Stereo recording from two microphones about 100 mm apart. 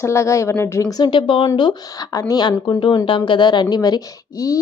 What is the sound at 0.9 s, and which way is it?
Speech, 50° left (ahead or behind).